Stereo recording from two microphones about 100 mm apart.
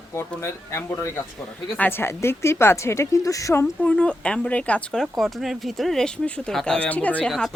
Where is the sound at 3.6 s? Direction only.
15° left (ahead or behind).